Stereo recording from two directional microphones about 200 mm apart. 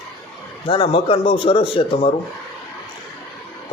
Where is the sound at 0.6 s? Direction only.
25° left (ahead or behind).